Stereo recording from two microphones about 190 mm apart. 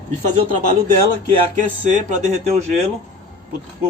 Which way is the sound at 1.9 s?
35° right (ahead or behind).